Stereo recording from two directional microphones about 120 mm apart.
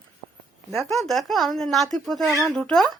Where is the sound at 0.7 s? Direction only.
Centre (ahead or behind).